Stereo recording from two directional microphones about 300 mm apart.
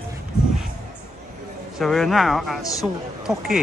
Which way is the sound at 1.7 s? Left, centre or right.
Centre.